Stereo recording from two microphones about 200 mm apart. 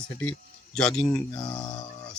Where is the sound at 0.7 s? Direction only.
5° left (ahead or behind).